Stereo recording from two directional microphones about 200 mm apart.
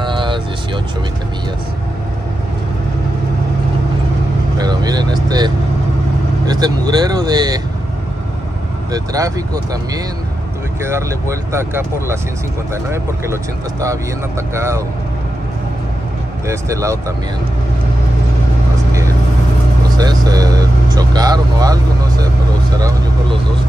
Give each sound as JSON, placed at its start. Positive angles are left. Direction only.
{"t": 0.0, "sound": "music", "side_deg": -25}
{"t": 4.6, "sound": "vehicle", "side_deg": -20}
{"t": 6.4, "sound": "speech", "side_deg": -20}
{"t": 8.9, "sound": "speech", "side_deg": -20}
{"t": 16.4, "sound": "speech", "side_deg": -15}
{"t": 20.0, "sound": "speech", "side_deg": -20}
{"t": 22.8, "sound": "speech", "side_deg": -20}